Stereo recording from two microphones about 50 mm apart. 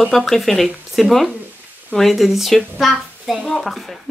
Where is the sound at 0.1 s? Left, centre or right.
Centre.